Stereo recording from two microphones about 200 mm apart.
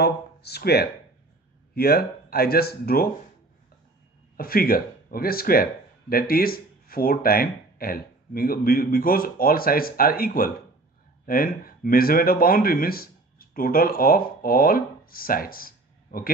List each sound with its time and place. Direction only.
0.0 s speech: 55° left (ahead or behind)
4.4 s speech: 45° left (ahead or behind)